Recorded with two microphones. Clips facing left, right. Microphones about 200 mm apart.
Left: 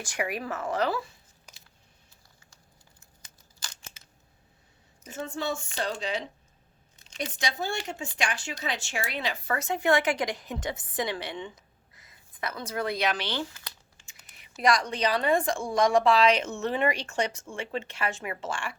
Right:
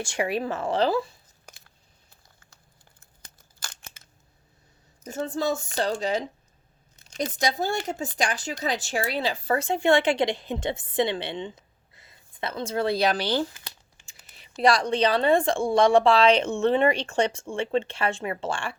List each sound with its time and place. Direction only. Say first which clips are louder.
0.0 s a woman's voice: right 5 dB; 30° right (ahead or behind)
3.0 s tearing: right 2 dB; 55° right (ahead or behind)
5.0 s speech: right 5 dB; 40° right (ahead or behind)
13.5 s crumpling: right 1 dB; 15° right (ahead or behind)
14.1 s typing: right 4 dB; 30° right (ahead or behind)
14.6 s a woman's voice: right 4 dB; 30° right (ahead or behind)